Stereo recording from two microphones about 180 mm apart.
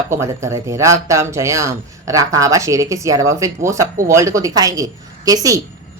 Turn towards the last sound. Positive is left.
turn(degrees=-20)  # may be behind; listen again after turning